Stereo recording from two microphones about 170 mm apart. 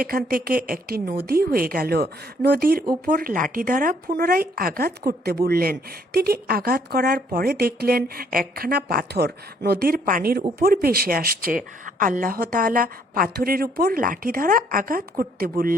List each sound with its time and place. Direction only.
0.0 s a woman's voice: 60° right (ahead or behind)